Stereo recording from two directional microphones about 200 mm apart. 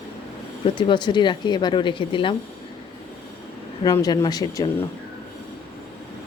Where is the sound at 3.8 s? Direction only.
20° left (ahead or behind).